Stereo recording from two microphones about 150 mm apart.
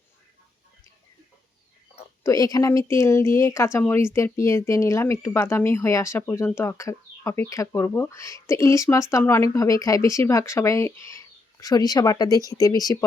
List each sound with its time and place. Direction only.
2.2 s speech: 25° left (ahead or behind)